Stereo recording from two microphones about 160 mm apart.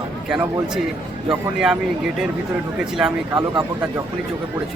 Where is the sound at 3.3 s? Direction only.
25° right (ahead or behind).